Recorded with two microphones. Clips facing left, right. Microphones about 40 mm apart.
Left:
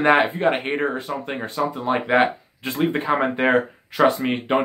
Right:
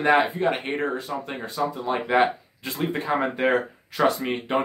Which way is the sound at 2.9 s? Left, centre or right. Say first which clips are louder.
Left 4 dB; left.